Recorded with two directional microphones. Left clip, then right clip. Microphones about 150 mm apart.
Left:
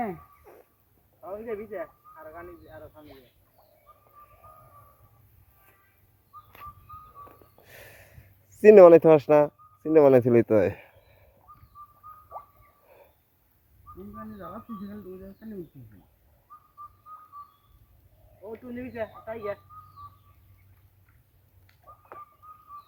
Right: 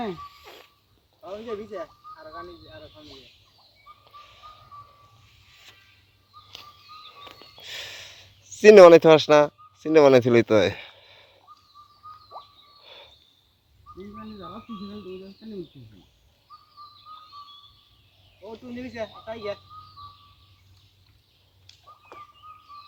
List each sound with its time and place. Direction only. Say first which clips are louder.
0.0 s music: right 1 dB; 5° left (ahead or behind)
1.2 s speech: right 1 dB; 55° right (ahead or behind)
7.3 s snort: right 11 dB; centre (ahead or behind)
8.5 s speech: right 2 dB; centre (ahead or behind)
12.8 s cricket: right 9 dB; 5° right (ahead or behind)
14.2 s speech: left 1 dB; 10° left (ahead or behind)
18.4 s speech: right 1 dB; 50° right (ahead or behind)